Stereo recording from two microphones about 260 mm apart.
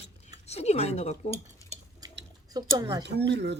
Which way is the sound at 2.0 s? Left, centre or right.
Centre.